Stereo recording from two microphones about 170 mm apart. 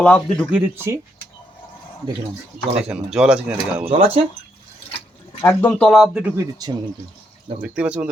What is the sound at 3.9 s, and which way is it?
Speech, 35° right (ahead or behind).